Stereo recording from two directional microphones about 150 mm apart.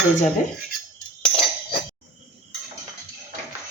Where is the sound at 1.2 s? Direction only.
35° left (ahead or behind).